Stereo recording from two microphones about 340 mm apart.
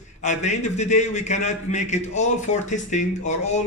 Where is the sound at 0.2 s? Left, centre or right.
Left.